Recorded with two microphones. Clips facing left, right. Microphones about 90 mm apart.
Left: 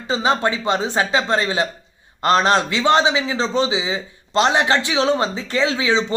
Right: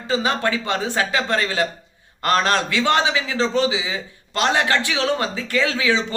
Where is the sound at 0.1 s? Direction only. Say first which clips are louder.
Left 2 dB; 20° left (ahead or behind).